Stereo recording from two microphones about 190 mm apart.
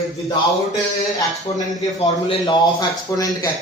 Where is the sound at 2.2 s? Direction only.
20° left (ahead or behind).